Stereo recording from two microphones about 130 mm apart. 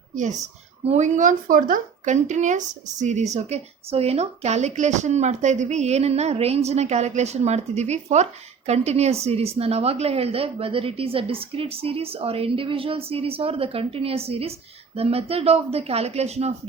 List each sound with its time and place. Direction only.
0.9 s speech: 65° right (ahead or behind)